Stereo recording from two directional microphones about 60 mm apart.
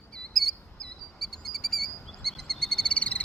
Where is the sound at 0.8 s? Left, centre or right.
Centre.